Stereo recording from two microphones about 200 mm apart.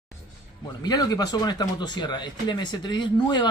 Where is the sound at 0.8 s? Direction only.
20° left (ahead or behind).